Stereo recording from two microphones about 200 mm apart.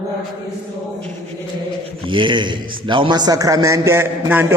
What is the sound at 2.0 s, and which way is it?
A man's voice, 25° right (ahead or behind).